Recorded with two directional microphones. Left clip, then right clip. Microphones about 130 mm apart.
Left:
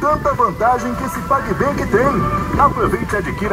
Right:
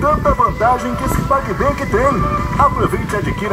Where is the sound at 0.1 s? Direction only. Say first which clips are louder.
Right 1 dB; 35° right (ahead or behind).